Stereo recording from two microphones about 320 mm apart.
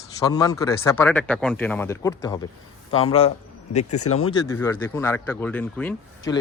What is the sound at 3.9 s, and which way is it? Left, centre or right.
Speech, left.